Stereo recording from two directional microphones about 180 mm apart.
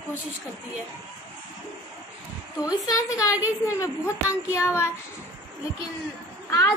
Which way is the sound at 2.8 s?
20° left (ahead or behind).